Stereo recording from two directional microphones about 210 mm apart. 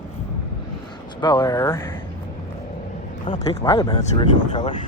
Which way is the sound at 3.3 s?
30° left (ahead or behind).